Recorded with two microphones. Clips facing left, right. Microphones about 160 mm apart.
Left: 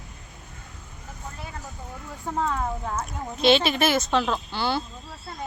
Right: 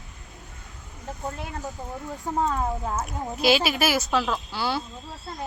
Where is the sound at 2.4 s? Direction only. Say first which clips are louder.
Right 1 dB; 25° right (ahead or behind).